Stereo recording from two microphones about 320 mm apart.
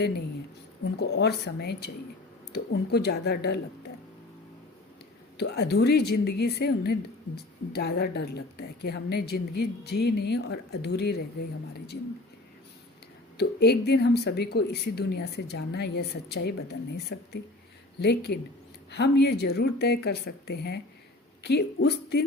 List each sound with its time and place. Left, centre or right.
0.9 s speech: left
5.4 s speech: left
13.3 s speech: left